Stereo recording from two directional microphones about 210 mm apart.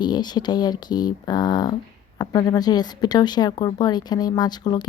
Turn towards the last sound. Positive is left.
turn(degrees=20)  # may be behind; listen again after turning